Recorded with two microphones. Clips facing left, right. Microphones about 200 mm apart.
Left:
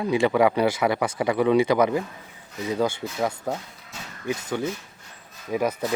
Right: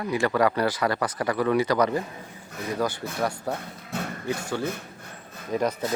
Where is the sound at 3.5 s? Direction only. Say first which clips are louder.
Right 4 dB; 60° right (ahead or behind).